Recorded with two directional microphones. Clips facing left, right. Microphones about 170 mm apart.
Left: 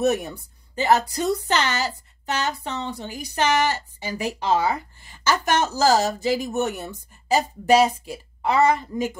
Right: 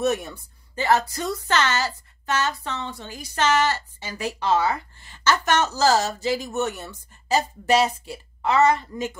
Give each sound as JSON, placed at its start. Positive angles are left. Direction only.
{"t": 0.0, "sound": "a woman's voice", "side_deg": 15}